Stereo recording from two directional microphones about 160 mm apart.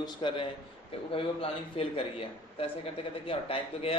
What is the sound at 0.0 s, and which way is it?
A man's voice, 30° left (ahead or behind).